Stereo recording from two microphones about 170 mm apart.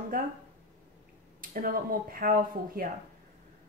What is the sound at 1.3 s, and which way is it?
Speech, 55° right (ahead or behind).